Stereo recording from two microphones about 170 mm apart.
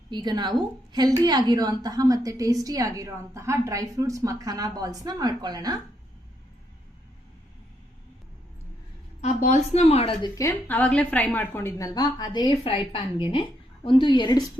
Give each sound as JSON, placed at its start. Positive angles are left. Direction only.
{"t": 0.1, "sound": "a woman's voice", "side_deg": -25}
{"t": 9.2, "sound": "a woman's voice", "side_deg": 45}
{"t": 10.3, "sound": "a woman's voice", "side_deg": 15}